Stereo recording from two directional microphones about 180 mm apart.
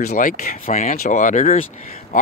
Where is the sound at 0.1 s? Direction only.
50° left (ahead or behind).